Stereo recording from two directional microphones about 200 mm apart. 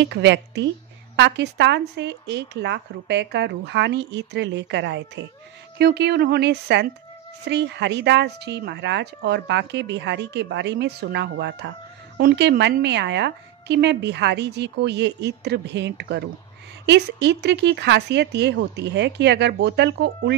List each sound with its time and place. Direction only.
0.1 s speech: 60° right (ahead or behind)